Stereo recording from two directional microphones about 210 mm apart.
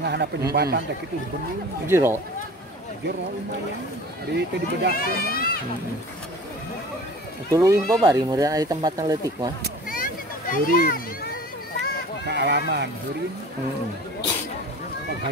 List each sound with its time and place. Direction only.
0.0 s a man's voice: 50° right (ahead or behind)
1.9 s speech: 10° right (ahead or behind)
4.3 s speech: 50° right (ahead or behind)
4.9 s speech: 45° left (ahead or behind)
7.5 s speech: 15° right (ahead or behind)
9.8 s a sound: 40° left (ahead or behind)
12.3 s speech: 55° right (ahead or behind)